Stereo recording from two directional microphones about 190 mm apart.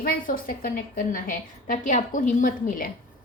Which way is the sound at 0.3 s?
50° left (ahead or behind).